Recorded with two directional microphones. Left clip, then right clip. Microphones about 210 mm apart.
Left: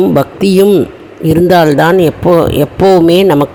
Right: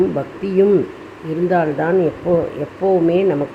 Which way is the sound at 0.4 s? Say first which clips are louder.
Left 5 dB; 50° left (ahead or behind).